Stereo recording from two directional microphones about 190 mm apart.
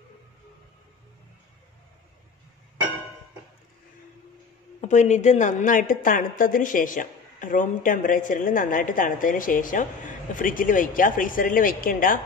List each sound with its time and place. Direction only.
4.8 s a woman's voice: 40° left (ahead or behind)